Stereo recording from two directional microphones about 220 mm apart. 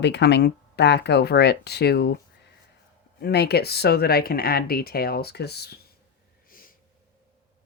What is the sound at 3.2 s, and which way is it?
Speech, 45° left (ahead or behind).